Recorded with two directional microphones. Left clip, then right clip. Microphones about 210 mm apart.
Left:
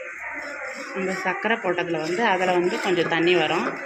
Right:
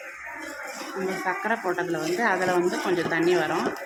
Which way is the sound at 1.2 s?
10° left (ahead or behind).